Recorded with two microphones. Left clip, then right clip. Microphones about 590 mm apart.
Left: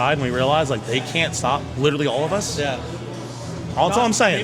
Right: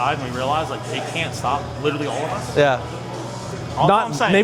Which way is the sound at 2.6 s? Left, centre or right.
Right.